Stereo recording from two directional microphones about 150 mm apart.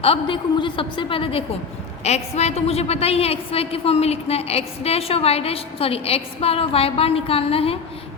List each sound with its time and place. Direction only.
0.0 s a woman's voice: 35° left (ahead or behind)